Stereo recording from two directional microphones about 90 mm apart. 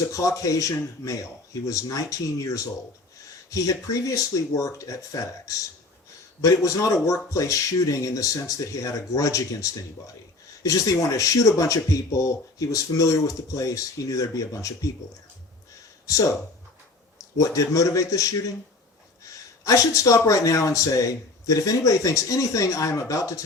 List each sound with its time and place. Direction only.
0.1 s speech: 40° left (ahead or behind)
17.3 s speech: 40° left (ahead or behind)